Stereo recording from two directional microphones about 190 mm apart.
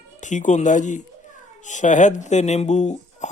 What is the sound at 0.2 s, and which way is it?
Speech, 40° left (ahead or behind).